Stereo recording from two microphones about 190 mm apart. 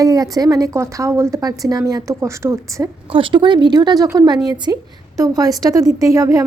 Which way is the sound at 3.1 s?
25° right (ahead or behind).